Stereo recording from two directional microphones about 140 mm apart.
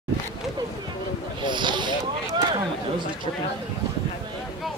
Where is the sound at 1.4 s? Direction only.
35° right (ahead or behind).